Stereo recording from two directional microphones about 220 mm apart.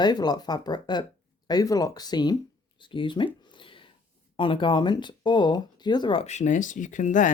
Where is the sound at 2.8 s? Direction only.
20° left (ahead or behind).